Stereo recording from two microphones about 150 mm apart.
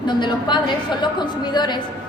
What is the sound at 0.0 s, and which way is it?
A woman's voice, 30° left (ahead or behind).